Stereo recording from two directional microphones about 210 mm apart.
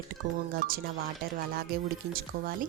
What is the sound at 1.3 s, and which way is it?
Speech, 45° right (ahead or behind).